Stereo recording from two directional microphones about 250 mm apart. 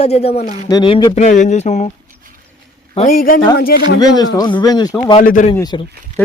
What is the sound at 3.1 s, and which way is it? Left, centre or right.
Speech, left.